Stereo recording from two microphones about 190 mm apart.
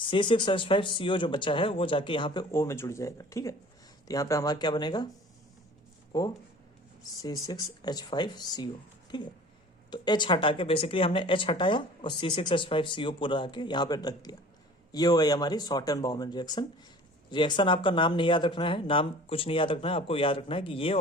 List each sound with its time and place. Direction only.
0.1 s speech: 25° left (ahead or behind)
6.1 s speech: 20° left (ahead or behind)
7.4 s speech: 20° left (ahead or behind)